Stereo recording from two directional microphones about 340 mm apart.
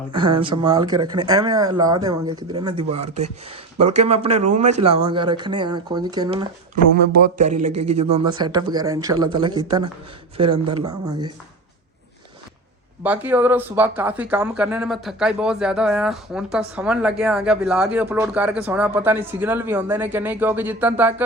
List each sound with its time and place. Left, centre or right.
0.1 s speech: centre
13.0 s speech: centre